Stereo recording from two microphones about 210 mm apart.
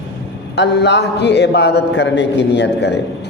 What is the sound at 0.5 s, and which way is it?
Speech, 55° left (ahead or behind).